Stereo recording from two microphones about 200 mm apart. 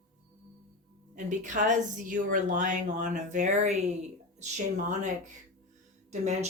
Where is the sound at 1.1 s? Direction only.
40° right (ahead or behind).